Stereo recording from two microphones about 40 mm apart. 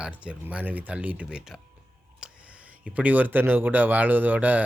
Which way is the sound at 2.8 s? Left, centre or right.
Right.